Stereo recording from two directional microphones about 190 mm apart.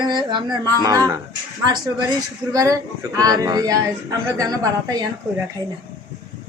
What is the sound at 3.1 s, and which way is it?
Speech, 20° right (ahead or behind).